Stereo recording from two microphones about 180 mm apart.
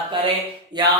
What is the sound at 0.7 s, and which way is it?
Music, 25° right (ahead or behind).